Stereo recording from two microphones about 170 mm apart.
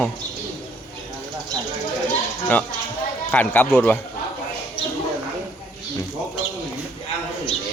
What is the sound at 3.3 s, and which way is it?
Speech, 10° left (ahead or behind).